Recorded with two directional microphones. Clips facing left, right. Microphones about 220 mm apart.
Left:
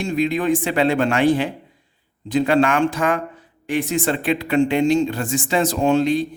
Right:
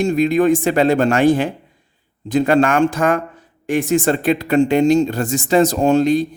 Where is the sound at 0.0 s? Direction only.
45° right (ahead or behind).